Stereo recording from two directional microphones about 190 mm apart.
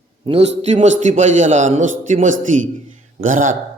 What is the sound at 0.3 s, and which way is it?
A man's voice, 35° right (ahead or behind).